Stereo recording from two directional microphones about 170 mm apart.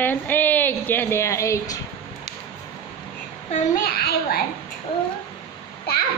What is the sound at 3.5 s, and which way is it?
Speech, 60° left (ahead or behind).